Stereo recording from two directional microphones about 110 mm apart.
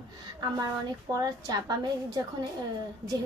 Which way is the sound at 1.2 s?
35° right (ahead or behind).